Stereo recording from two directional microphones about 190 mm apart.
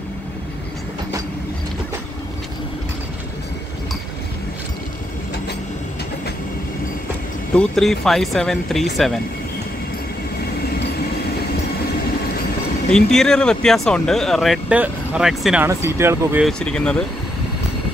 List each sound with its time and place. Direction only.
7.5 s speech: centre (ahead or behind)
12.9 s speech: 5° left (ahead or behind); by 16.4 s 15° right (ahead or behind)
16.4 s speech: 5° left (ahead or behind)